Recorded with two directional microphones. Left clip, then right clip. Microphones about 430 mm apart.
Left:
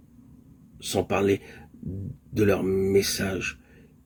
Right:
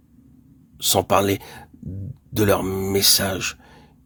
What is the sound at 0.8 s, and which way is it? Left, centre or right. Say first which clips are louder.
Speech: right 7 dB; right.